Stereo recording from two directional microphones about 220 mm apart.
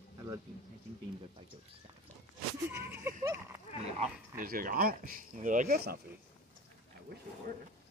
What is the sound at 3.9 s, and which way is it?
Speech, 40° right (ahead or behind).